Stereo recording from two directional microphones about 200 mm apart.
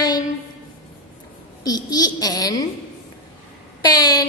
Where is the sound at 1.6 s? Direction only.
20° left (ahead or behind).